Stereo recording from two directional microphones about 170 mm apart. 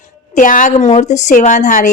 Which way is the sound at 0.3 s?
50° left (ahead or behind).